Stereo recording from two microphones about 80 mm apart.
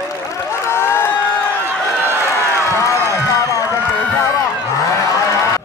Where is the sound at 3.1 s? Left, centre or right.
Left.